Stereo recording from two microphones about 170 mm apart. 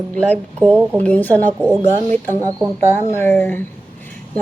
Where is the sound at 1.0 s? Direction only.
10° left (ahead or behind).